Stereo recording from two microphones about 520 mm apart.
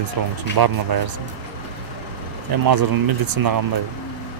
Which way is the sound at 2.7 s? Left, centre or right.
Right.